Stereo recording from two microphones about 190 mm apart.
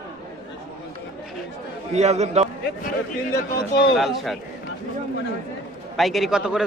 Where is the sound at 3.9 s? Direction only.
Centre (ahead or behind).